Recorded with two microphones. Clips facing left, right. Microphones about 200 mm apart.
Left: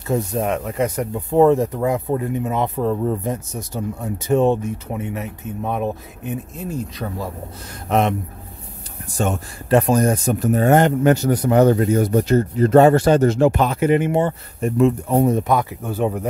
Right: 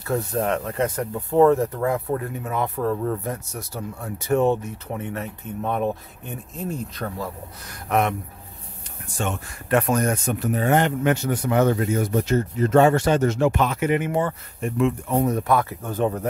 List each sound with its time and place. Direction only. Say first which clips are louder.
0.0 s speech: left 3 dB; 20° left (ahead or behind)
7.9 s speech: left 3 dB; 25° left (ahead or behind)
9.1 s speech: left 6 dB; 40° left (ahead or behind)
14.6 s speech: left 5 dB; 40° left (ahead or behind)
15.3 s speech: left 2 dB; 20° left (ahead or behind)
15.8 s speech: left 2 dB; 10° left (ahead or behind)